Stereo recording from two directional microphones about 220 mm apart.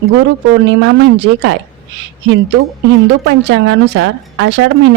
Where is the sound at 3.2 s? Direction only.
55° right (ahead or behind).